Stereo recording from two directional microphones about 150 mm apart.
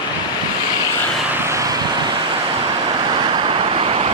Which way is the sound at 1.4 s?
20° right (ahead or behind).